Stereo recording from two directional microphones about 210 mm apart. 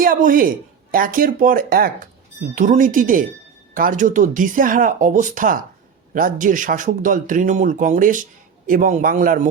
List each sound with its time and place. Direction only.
0.0 s speech: 40° right (ahead or behind)